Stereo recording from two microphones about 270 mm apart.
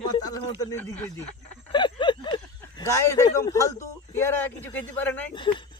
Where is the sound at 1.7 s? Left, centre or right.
Centre.